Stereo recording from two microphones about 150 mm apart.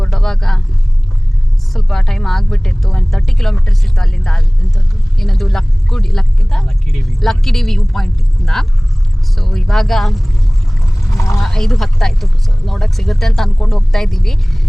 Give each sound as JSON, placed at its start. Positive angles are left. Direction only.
{"t": 0.0, "sound": "vehicle", "side_deg": 0}
{"t": 1.7, "sound": "speech", "side_deg": 0}
{"t": 11.1, "sound": "speech", "side_deg": 20}
{"t": 11.3, "sound": "speech", "side_deg": 5}